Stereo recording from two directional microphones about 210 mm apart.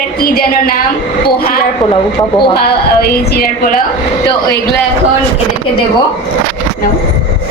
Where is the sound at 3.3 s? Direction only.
45° left (ahead or behind).